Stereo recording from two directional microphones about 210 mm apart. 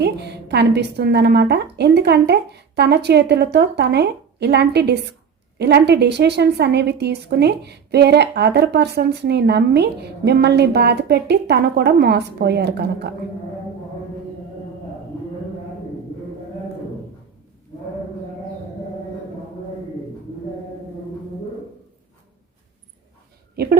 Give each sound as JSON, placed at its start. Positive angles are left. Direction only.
{"t": 0.0, "sound": "a woman's voice", "side_deg": -50}